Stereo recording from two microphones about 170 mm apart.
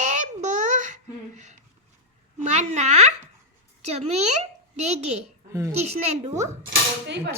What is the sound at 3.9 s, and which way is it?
A child's voice, 40° right (ahead or behind).